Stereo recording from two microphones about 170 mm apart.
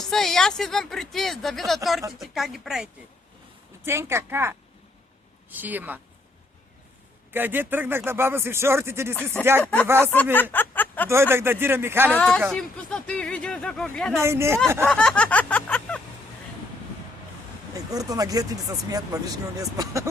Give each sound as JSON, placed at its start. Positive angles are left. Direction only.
{"t": 0.0, "sound": "speech", "side_deg": 0}
{"t": 3.8, "sound": "speech", "side_deg": -15}
{"t": 7.3, "sound": "speech", "side_deg": -10}
{"t": 10.5, "sound": "speech", "side_deg": 10}
{"t": 11.1, "sound": "speech", "side_deg": -15}
{"t": 12.1, "sound": "speech", "side_deg": 5}
{"t": 14.2, "sound": "speech", "side_deg": -15}
{"t": 14.8, "sound": "a sound", "side_deg": 5}
{"t": 17.7, "sound": "speech", "side_deg": -20}